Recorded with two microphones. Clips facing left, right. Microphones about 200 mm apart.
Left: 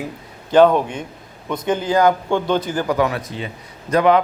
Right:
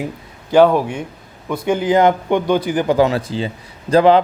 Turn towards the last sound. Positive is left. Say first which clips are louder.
# right 4 dB
turn(degrees=-30)  # may be behind; listen again after turning